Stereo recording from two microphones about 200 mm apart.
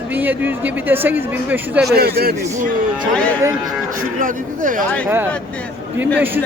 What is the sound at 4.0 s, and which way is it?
Speech, 40° right (ahead or behind).